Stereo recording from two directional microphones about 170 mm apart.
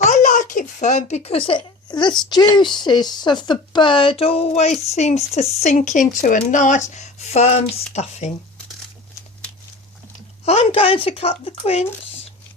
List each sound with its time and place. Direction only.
0.0 s a sound: 45° left (ahead or behind); by 2.1 s 25° left (ahead or behind)
2.3 s speech: 25° left (ahead or behind)
10.4 s speech: 40° left (ahead or behind)